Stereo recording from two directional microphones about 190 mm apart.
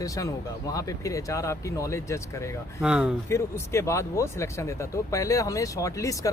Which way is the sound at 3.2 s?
15° left (ahead or behind).